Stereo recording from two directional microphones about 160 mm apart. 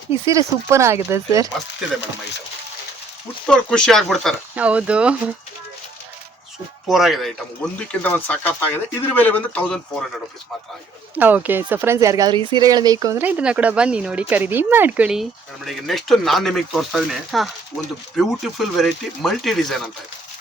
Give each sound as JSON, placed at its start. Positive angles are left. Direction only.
{"t": 0.3, "sound": "speech", "side_deg": -20}
{"t": 3.4, "sound": "speech", "side_deg": 5}
{"t": 4.5, "sound": "speech", "side_deg": -10}
{"t": 6.8, "sound": "speech", "side_deg": 0}
{"t": 11.1, "sound": "speech", "side_deg": -10}
{"t": 13.2, "sound": "speech", "side_deg": -10}